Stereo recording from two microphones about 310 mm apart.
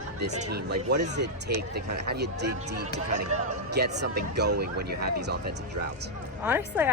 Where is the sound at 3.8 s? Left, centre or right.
Right.